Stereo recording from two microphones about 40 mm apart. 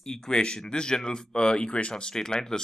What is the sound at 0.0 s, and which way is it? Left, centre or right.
Speech, centre.